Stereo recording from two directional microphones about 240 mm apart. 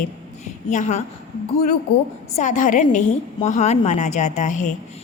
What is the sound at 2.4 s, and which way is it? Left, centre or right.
A woman's voice, left.